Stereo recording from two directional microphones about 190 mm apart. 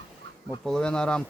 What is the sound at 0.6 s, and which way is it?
Speech, 5° left (ahead or behind).